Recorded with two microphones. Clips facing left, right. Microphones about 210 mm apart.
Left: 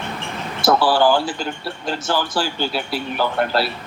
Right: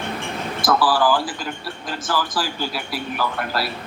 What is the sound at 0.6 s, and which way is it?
A man's voice, 25° left (ahead or behind).